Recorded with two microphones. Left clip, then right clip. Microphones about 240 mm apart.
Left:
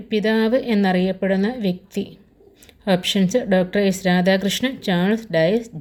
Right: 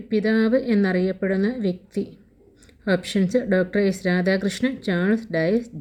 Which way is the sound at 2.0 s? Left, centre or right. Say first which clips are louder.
Left 1 dB; left.